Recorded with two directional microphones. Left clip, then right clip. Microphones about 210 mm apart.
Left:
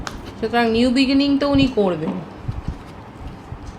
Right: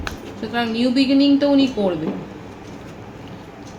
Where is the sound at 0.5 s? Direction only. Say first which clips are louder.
Left 3 dB; 50° left (ahead or behind).